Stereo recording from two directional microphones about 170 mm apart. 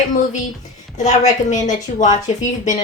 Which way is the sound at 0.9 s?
45° left (ahead or behind).